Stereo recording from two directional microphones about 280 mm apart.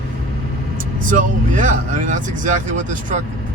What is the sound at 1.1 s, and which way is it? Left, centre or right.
Speech, right.